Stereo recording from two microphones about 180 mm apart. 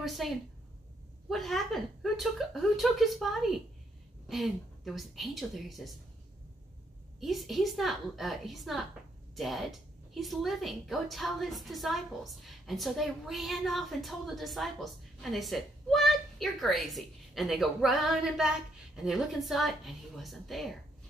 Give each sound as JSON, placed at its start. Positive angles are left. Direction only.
{"t": 0.0, "sound": "a woman's voice", "side_deg": 0}
{"t": 1.3, "sound": "a woman's voice", "side_deg": 0}
{"t": 7.2, "sound": "a woman's voice", "side_deg": 0}